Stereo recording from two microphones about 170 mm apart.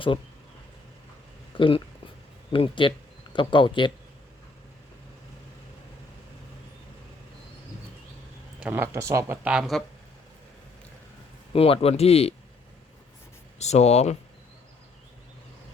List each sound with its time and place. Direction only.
1.5 s speech: 30° left (ahead or behind)
8.6 s speech: 10° right (ahead or behind)
11.5 s speech: 35° left (ahead or behind)
13.6 s speech: 40° left (ahead or behind)